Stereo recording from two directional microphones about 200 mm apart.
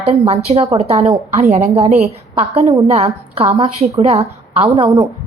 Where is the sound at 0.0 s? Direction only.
30° right (ahead or behind).